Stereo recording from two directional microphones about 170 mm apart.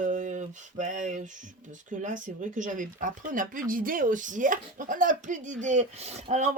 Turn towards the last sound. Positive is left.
turn(degrees=-40)  # may be behind; listen again after turning